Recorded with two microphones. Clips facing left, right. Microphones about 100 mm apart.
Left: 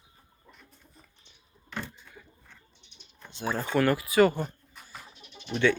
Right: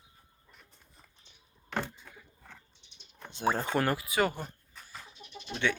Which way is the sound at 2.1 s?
55° right (ahead or behind).